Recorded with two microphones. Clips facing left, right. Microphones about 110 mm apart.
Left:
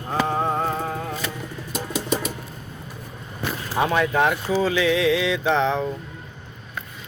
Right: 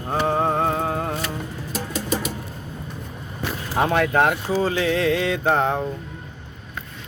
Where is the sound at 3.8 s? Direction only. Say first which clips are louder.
Right 1 dB; 55° right (ahead or behind).